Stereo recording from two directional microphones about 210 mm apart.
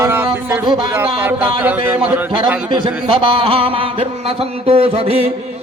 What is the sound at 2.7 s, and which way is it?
A man's voice, 20° right (ahead or behind).